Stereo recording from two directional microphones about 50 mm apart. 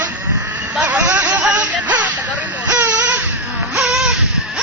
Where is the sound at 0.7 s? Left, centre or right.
Right.